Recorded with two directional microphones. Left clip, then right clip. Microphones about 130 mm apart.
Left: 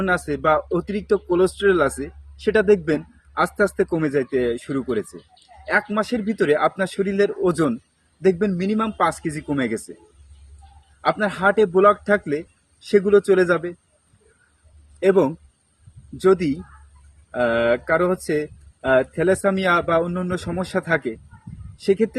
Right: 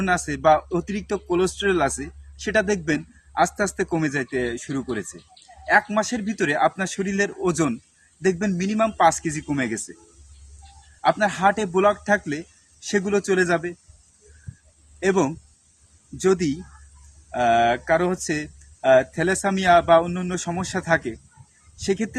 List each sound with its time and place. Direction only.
0.0 s speech: 20° right (ahead or behind)
11.0 s speech: 20° right (ahead or behind)
13.1 s speech: 20° right (ahead or behind)
15.0 s speech: 20° right (ahead or behind)